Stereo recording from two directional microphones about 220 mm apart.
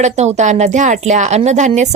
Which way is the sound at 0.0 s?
30° right (ahead or behind).